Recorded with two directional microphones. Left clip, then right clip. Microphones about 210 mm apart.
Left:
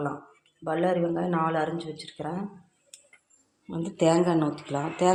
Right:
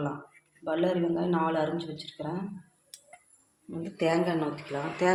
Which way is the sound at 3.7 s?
35° left (ahead or behind).